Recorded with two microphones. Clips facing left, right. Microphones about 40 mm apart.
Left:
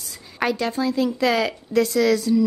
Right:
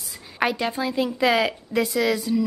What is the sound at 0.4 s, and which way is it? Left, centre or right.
A woman's voice, centre.